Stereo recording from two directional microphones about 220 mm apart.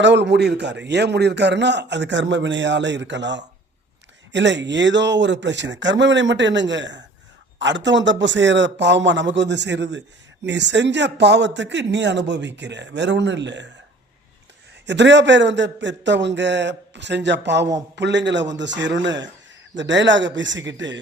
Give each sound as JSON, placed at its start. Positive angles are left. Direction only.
{"t": 0.0, "sound": "a man's voice", "side_deg": -55}
{"t": 14.8, "sound": "a man's voice", "side_deg": -55}